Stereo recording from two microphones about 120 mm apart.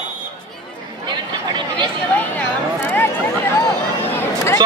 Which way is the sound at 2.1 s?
15° left (ahead or behind).